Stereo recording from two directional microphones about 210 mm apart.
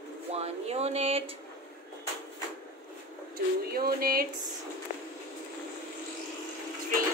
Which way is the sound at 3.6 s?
45° right (ahead or behind).